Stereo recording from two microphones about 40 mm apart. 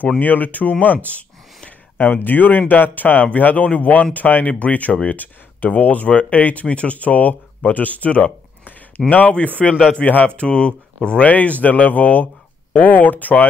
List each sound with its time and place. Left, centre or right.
0.2 s speech: left
2.0 s speech: left
9.0 s speech: centre
9.6 s a man's voice: centre
9.9 s speech: left
10.2 s speech: left